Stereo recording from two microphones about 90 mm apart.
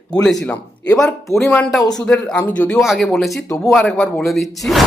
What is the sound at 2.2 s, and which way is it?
Speech, 15° left (ahead or behind).